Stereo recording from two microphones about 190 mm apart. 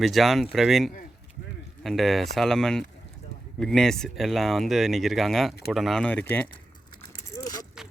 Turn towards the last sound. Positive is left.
turn(degrees=20)  # may be behind; listen again after turning